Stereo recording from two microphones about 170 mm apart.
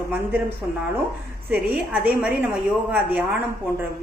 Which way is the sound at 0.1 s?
10° right (ahead or behind).